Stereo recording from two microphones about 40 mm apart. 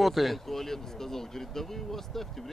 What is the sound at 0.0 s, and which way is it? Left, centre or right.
Speech, centre.